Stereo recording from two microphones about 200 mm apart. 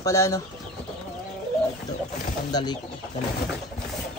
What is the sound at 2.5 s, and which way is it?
Speech, 20° left (ahead or behind).